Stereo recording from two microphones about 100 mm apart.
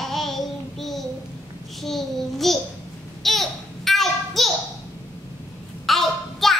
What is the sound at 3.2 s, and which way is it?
Babbling, centre (ahead or behind).